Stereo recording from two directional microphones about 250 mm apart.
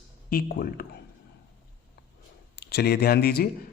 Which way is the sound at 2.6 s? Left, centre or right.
Left.